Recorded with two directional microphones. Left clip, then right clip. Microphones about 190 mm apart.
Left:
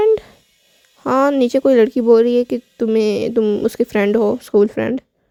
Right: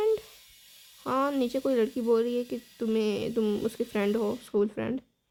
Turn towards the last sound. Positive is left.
turn(degrees=35)  # may be behind; listen again after turning